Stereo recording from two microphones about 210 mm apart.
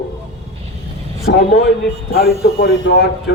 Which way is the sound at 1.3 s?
50° left (ahead or behind).